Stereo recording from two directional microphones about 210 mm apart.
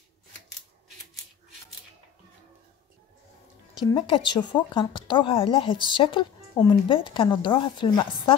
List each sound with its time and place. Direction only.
3.9 s speech: 20° left (ahead or behind)